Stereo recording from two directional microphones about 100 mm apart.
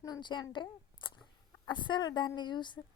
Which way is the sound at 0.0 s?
45° left (ahead or behind).